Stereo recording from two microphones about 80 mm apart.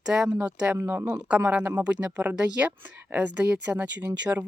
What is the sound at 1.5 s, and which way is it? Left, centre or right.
Speech, centre.